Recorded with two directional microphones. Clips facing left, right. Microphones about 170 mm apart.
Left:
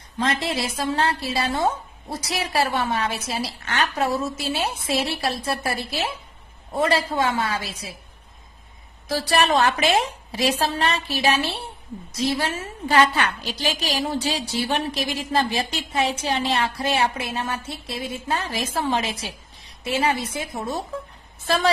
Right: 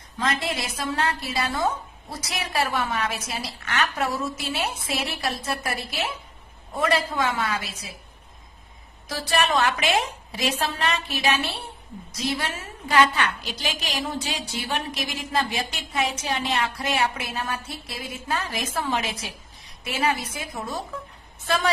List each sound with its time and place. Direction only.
0.2 s a woman's voice: 30° left (ahead or behind)
9.1 s a woman's voice: 30° left (ahead or behind)